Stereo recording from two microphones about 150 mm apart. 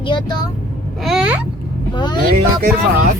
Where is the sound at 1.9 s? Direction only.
30° left (ahead or behind).